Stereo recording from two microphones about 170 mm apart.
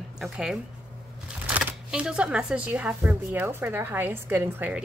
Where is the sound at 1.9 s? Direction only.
5° right (ahead or behind).